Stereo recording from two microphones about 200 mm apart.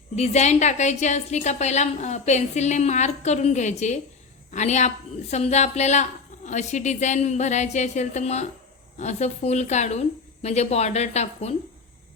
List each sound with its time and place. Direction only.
0.2 s a woman's voice: 35° left (ahead or behind)